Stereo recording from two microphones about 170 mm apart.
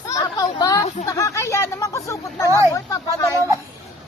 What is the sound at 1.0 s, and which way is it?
Speech, 20° left (ahead or behind).